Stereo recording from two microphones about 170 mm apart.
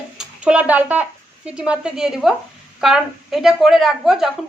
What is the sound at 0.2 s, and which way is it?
A woman's voice, 5° right (ahead or behind).